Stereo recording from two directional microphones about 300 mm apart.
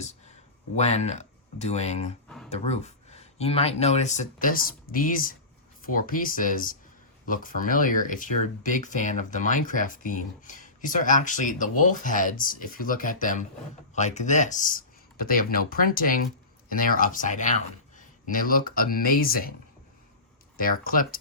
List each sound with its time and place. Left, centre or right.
0.8 s speech: left
20.6 s speech: left